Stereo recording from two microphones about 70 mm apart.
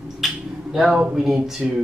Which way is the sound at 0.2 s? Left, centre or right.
Centre.